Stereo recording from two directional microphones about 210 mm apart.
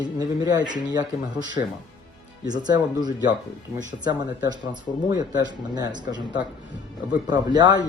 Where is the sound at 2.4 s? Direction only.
20° right (ahead or behind).